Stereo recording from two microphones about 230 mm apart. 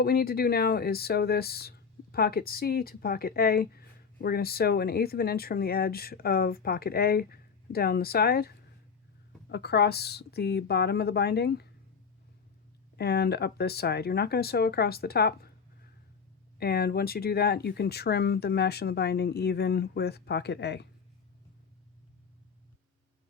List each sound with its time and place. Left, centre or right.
0.0 s speech: left
13.0 s speech: left
16.6 s speech: left